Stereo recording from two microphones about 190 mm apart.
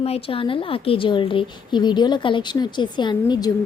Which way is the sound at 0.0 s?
30° left (ahead or behind).